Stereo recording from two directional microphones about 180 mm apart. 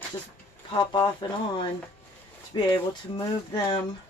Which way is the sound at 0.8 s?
25° left (ahead or behind).